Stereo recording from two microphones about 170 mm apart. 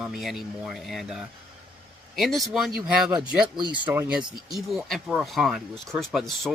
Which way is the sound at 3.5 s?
25° right (ahead or behind).